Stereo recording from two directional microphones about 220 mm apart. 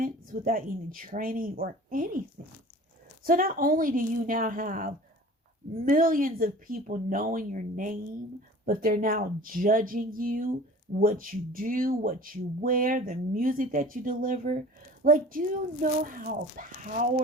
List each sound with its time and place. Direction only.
0.0 s speech: 40° right (ahead or behind)
3.2 s speech: 40° right (ahead or behind)